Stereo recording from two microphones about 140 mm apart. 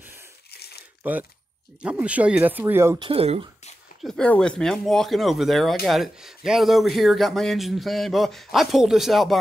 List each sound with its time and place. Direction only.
1.0 s speech: 10° right (ahead or behind)
3.0 s speech: 45° right (ahead or behind)
4.0 s speech: 5° left (ahead or behind)